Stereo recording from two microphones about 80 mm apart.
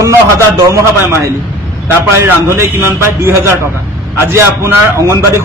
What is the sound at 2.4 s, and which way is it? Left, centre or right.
A man's voice, right.